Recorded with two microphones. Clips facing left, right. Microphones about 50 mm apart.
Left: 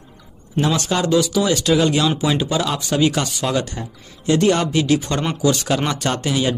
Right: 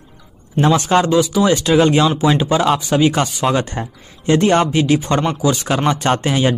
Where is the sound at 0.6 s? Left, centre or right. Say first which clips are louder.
Right 6 dB; right.